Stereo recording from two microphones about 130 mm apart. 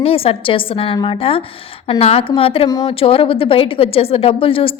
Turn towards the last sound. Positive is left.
turn(degrees=45)  # may be behind; listen again after turning